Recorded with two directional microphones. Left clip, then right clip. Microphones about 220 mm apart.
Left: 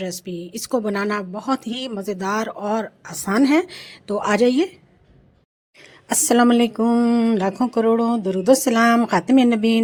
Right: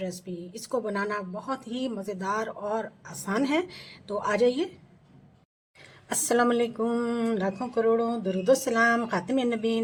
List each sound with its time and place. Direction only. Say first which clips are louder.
0.0 s a woman's voice: left 7 dB; 35° left (ahead or behind)
5.8 s a woman's voice: left 9 dB; 30° left (ahead or behind)